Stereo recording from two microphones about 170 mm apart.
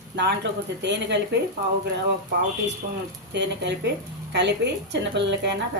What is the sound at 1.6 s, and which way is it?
Speech, 70° right (ahead or behind).